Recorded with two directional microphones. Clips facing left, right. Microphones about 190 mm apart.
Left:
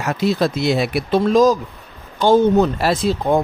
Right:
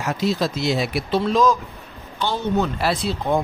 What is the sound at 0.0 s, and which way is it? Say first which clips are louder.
A man's voice: left 4 dB; 60° left (ahead or behind).